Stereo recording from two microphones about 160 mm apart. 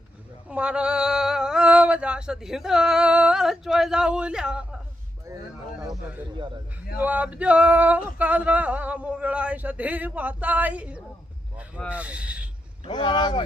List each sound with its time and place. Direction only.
0.4 s male singing: 5° right (ahead or behind)
7.0 s male singing: 10° right (ahead or behind)
12.8 s speech: 30° left (ahead or behind)